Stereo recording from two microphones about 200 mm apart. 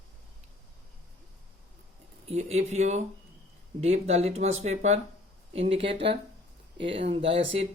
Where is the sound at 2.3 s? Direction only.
30° right (ahead or behind).